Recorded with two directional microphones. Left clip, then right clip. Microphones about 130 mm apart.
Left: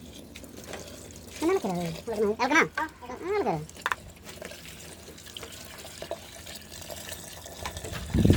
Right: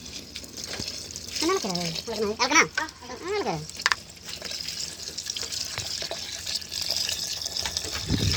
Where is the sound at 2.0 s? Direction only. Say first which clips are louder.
Left 1 dB; 45° left (ahead or behind).